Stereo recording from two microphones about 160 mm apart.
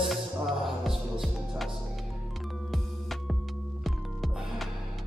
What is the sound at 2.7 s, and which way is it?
Music, centre (ahead or behind).